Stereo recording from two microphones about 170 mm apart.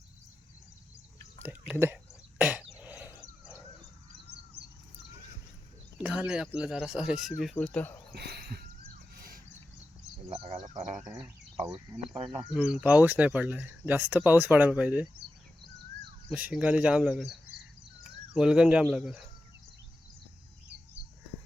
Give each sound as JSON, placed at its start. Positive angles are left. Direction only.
{"t": 1.4, "sound": "speech", "side_deg": -10}
{"t": 2.4, "sound": "throat clearing", "side_deg": -10}
{"t": 6.0, "sound": "a sound", "side_deg": -5}
{"t": 6.6, "sound": "speech", "side_deg": -5}
{"t": 8.1, "sound": "a sound", "side_deg": -70}
{"t": 10.2, "sound": "insect", "side_deg": -35}
{"t": 11.5, "sound": "speech", "side_deg": -25}
{"t": 12.5, "sound": "speech", "side_deg": -5}
{"t": 16.3, "sound": "speech", "side_deg": -5}